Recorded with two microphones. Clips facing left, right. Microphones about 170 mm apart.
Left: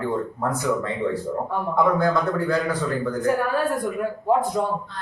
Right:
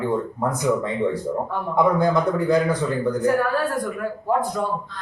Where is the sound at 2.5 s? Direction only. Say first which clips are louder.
Right 4 dB; 20° right (ahead or behind).